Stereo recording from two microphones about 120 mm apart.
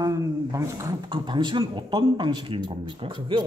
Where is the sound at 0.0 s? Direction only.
25° right (ahead or behind).